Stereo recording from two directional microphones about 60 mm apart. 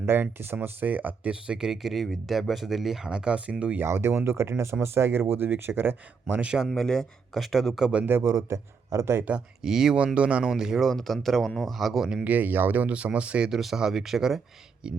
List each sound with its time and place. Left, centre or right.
0.0 s speech: right
1.3 s speech: centre
1.7 s speech: centre
3.8 s speech: right
6.4 s speech: centre
6.7 s speech: centre
8.0 s speech: right
9.6 s speech: centre
10.2 s speech: centre
10.5 s speech: centre
10.8 s speech: centre
12.2 s speech: right
13.5 s speech: centre